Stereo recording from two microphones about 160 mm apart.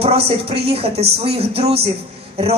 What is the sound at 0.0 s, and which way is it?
A woman's voice, 40° right (ahead or behind).